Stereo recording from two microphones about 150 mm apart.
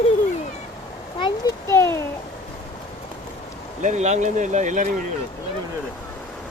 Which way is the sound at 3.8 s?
50° right (ahead or behind).